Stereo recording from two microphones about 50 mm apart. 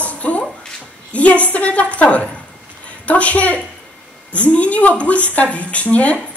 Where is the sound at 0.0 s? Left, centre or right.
Left.